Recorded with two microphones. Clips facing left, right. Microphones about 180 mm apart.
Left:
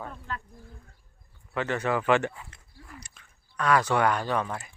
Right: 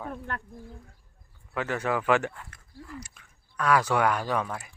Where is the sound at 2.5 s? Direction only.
20° left (ahead or behind).